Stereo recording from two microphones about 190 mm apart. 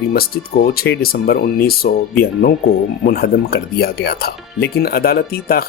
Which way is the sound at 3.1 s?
55° left (ahead or behind).